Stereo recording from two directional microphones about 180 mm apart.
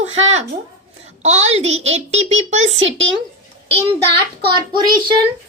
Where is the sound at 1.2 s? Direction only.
35° right (ahead or behind).